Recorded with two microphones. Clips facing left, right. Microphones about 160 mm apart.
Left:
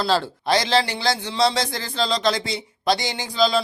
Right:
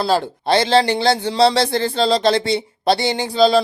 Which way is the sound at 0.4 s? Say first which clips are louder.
Right 6 dB; 30° right (ahead or behind).